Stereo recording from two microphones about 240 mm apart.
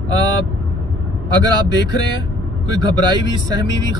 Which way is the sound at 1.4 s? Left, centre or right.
Centre.